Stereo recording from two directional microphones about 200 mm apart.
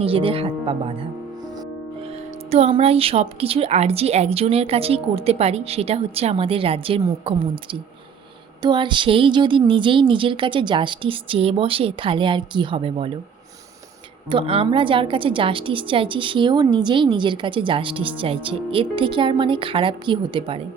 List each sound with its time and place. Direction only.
0.0 s a woman's voice: 25° right (ahead or behind)
2.5 s a woman's voice: 30° right (ahead or behind)
14.3 s a woman's voice: 25° right (ahead or behind)